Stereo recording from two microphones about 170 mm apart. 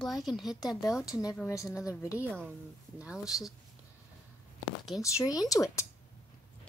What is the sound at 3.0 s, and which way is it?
Speech, 5° right (ahead or behind).